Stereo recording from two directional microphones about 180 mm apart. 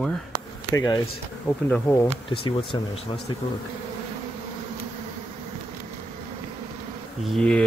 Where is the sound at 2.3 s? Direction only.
30° left (ahead or behind).